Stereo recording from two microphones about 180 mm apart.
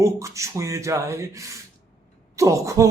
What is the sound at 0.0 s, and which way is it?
Speech, 15° right (ahead or behind).